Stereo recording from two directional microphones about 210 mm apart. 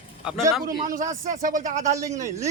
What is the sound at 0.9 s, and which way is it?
Speech, 40° right (ahead or behind).